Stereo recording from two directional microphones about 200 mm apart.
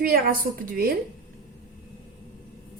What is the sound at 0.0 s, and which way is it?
Speech, 45° right (ahead or behind).